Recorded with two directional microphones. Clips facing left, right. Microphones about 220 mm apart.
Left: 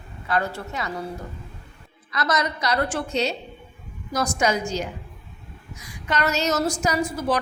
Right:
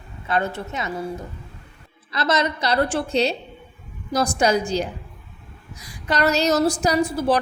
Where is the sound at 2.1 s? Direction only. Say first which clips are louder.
Right 3 dB; 25° right (ahead or behind).